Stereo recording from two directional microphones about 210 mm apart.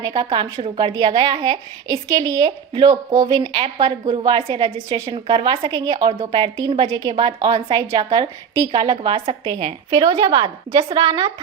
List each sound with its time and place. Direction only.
0.2 s a woman's voice: 20° right (ahead or behind)
5.3 s a woman's voice: 25° right (ahead or behind)